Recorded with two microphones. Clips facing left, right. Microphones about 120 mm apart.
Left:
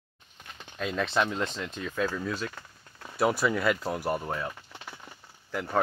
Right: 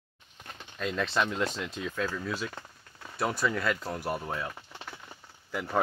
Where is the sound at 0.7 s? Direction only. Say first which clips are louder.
Left 2 dB; centre (ahead or behind).